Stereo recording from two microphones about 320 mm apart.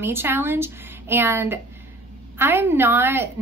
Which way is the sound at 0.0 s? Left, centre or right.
Centre.